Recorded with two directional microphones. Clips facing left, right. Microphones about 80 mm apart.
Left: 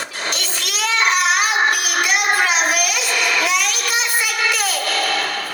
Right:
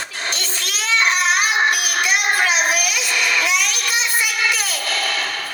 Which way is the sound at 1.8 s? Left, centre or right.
Left.